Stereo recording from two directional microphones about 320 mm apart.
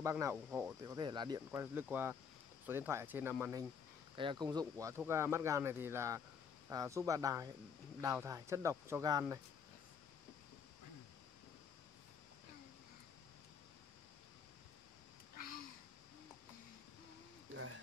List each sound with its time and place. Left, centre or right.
0.0 s speech: centre